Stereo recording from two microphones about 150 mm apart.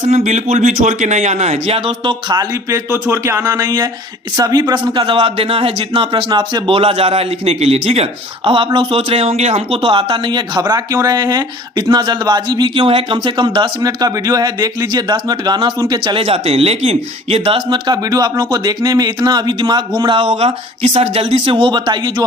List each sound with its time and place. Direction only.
0.0 s speech: 50° right (ahead or behind)
2.3 s a man's voice: 20° right (ahead or behind)
20.2 s a man's voice: 45° right (ahead or behind)